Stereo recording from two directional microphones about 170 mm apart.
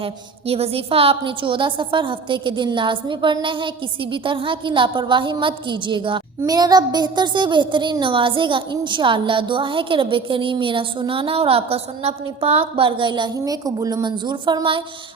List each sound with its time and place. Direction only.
0.0 s a woman's voice: 35° right (ahead or behind)